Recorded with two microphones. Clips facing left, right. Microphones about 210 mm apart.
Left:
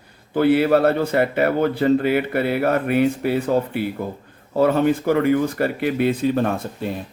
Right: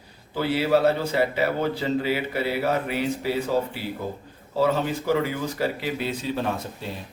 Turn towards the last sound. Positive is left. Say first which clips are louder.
# left 6 dB
turn(degrees=55)  # may be behind; listen again after turning